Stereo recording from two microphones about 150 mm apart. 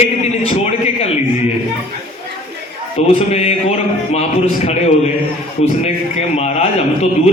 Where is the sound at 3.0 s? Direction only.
45° left (ahead or behind).